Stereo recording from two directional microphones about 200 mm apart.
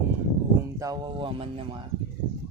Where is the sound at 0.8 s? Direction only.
20° right (ahead or behind).